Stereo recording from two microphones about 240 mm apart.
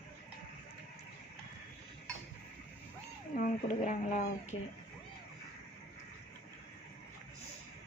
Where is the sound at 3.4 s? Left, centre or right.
Left.